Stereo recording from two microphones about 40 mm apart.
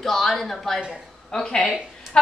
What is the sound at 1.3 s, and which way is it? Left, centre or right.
Speech, centre.